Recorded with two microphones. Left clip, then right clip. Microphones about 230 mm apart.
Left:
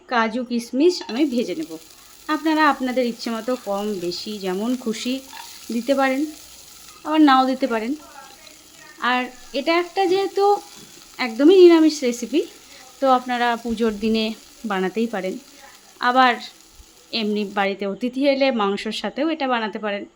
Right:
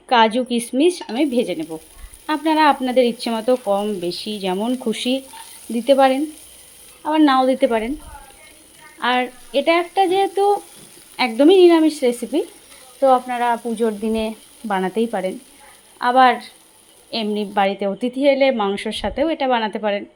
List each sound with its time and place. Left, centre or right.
0.1 s a woman's voice: centre
1.0 s frying: centre
9.0 s frying: centre
12.3 s speech: centre
16.0 s frying: centre